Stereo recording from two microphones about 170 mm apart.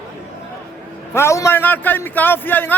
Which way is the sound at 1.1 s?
15° left (ahead or behind).